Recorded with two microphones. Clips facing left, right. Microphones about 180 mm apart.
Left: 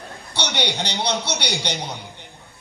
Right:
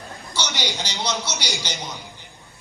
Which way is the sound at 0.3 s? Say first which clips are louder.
Left 3 dB; 65° left (ahead or behind).